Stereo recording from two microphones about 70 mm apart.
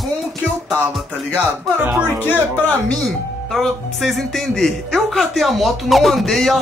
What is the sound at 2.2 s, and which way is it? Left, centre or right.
Speech, left.